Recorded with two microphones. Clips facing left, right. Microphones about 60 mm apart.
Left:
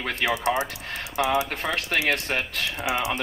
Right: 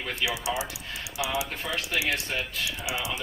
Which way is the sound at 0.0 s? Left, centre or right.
Left.